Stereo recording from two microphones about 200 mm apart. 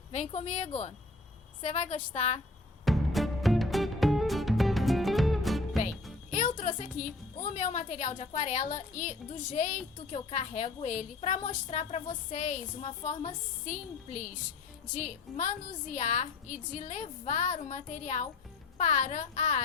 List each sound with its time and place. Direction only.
0.1 s a woman's voice: 35° left (ahead or behind)
2.8 s music: centre (ahead or behind)
6.3 s music: 40° left (ahead or behind)
7.5 s a woman's voice: 35° left (ahead or behind)